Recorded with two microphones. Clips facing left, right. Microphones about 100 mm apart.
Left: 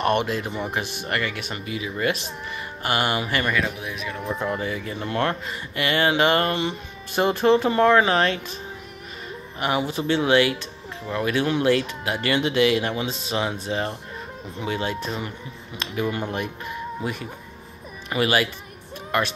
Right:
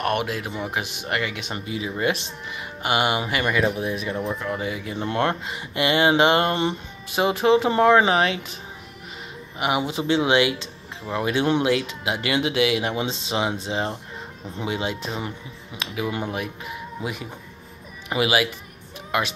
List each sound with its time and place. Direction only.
0.0 s speech: 5° right (ahead or behind)
3.7 s speech: 30° right (ahead or behind)
4.6 s speech: 15° right (ahead or behind)
4.9 s speech: 25° right (ahead or behind)
7.1 s speech: 10° right (ahead or behind)
9.6 s speech: 15° right (ahead or behind)
12.9 s speech: 25° right (ahead or behind)
15.8 s speech: 5° right (ahead or behind)